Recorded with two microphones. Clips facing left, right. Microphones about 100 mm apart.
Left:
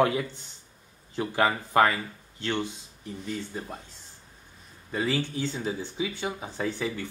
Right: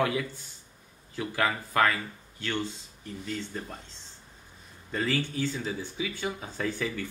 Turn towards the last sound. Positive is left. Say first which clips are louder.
# left 1 dB
turn(degrees=20)  # may be behind; listen again after turning